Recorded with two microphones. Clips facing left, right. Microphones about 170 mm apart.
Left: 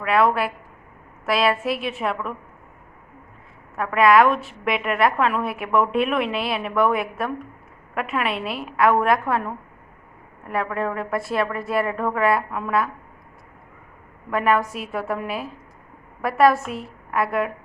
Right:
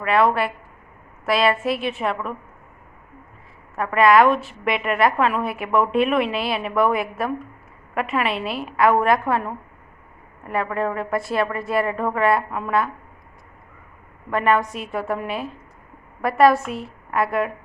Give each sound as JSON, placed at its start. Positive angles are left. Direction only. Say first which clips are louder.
{"t": 0.0, "sound": "a woman's voice", "louder": "right 1 dB", "side_deg": 0}
{"t": 3.8, "sound": "a woman's voice", "louder": "right 1 dB", "side_deg": 0}
{"t": 14.3, "sound": "a woman's voice", "louder": "right 1 dB", "side_deg": 5}